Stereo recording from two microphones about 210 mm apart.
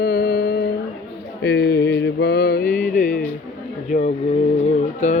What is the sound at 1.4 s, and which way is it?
Mantra, 55° left (ahead or behind).